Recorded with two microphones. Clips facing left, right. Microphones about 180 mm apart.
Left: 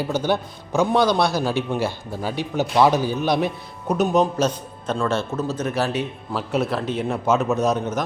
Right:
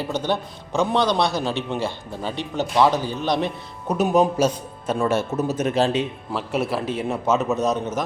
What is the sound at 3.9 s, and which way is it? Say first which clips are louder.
A man's voice: even; 5° right (ahead or behind).